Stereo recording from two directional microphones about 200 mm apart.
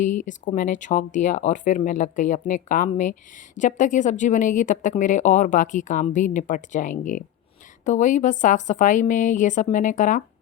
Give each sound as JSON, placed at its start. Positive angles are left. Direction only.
{"t": 0.3, "sound": "speech", "side_deg": 40}